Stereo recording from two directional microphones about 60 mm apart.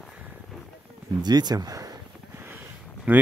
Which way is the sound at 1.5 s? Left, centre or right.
Right.